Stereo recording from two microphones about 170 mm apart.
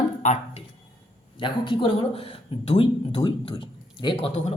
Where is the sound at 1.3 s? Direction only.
30° left (ahead or behind).